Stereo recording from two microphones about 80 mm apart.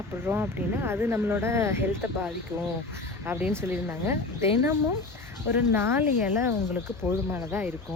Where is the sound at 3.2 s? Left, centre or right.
Right.